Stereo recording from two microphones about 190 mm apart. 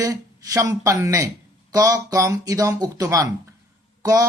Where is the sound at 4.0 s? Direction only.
20° right (ahead or behind).